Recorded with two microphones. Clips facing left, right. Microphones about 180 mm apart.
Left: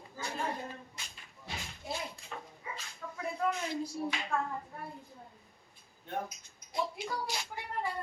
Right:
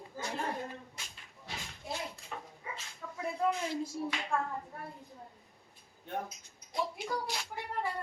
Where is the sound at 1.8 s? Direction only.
Centre (ahead or behind).